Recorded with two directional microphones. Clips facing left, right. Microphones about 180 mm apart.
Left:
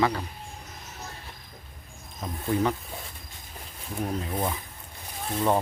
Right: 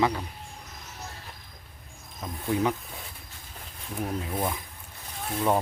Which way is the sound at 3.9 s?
Centre (ahead or behind).